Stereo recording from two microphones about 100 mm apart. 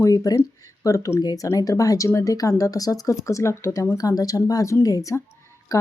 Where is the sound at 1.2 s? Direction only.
40° left (ahead or behind).